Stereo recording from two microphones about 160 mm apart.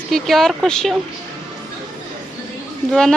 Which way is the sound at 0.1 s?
Centre (ahead or behind).